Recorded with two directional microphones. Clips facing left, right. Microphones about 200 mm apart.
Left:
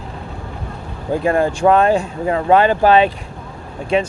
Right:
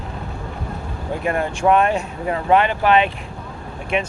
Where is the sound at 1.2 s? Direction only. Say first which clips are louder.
Left 4 dB; 30° left (ahead or behind).